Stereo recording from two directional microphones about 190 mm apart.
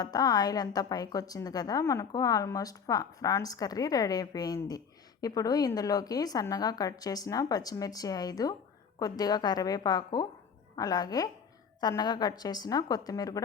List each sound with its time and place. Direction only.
0.0 s a woman's voice: 20° left (ahead or behind)